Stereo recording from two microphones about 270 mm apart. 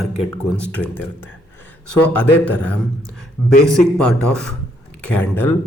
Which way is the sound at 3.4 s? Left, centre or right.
Left.